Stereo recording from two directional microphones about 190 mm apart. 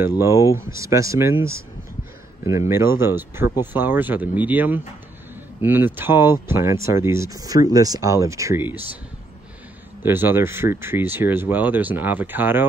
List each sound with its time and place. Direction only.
0.2 s speech: 15° right (ahead or behind)
2.7 s speech: 15° right (ahead or behind)
10.0 s speech: 10° right (ahead or behind)